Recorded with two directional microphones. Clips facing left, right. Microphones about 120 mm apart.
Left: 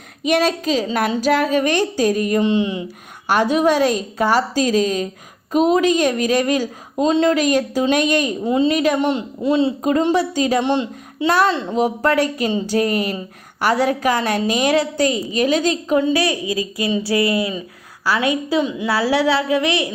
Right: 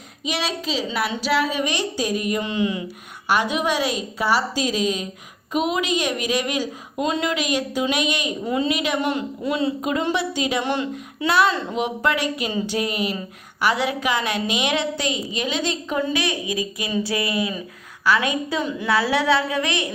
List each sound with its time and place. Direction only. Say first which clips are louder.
0.3 s a woman's voice: left 9 dB; 45° left (ahead or behind)
2.4 s a woman's voice: left 6 dB; 25° left (ahead or behind)
3.2 s a woman's voice: left 6 dB; 45° left (ahead or behind)
7.0 s a woman's voice: left 8 dB; 35° left (ahead or behind)
8.4 s a woman's voice: left 5 dB; 25° left (ahead or behind)
8.7 s a woman's voice: left 6 dB; 45° left (ahead or behind)
9.0 s a woman's voice: left 4 dB; 25° left (ahead or behind)
10.1 s a woman's voice: left 6 dB; 40° left (ahead or behind)
10.6 s speech: left 5 dB; 25° left (ahead or behind)
11.3 s a woman's voice: left 2 dB; 40° left (ahead or behind)
15.9 s a woman's voice: left 7 dB; 30° left (ahead or behind)
16.3 s a woman's voice: left 4 dB; 20° right (ahead or behind)
16.8 s a woman's voice: left 8 dB; 25° left (ahead or behind)